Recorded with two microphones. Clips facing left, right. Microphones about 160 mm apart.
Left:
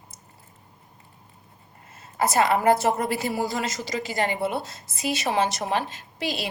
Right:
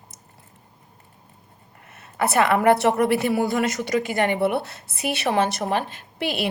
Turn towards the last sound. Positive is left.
turn(degrees=-60)  # may be behind; listen again after turning